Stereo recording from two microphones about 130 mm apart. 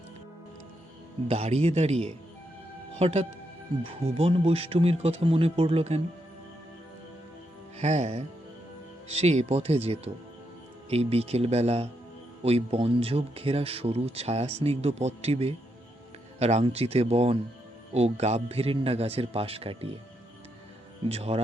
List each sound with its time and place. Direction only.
1.3 s speech: 55° right (ahead or behind)
7.8 s speech: 60° right (ahead or behind)
21.1 s speech: 50° right (ahead or behind)